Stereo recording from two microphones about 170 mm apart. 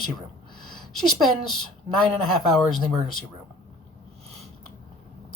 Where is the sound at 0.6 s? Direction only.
25° left (ahead or behind).